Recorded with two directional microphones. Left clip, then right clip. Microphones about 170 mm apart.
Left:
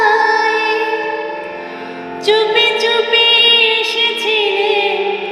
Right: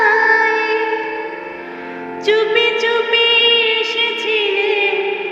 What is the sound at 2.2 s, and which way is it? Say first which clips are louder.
Music: left 2 dB; 5° right (ahead or behind).